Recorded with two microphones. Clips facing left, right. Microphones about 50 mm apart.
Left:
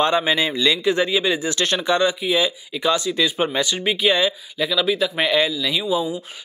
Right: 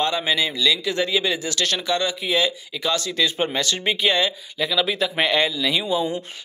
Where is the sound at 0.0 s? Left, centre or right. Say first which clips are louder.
Left 3 dB; left.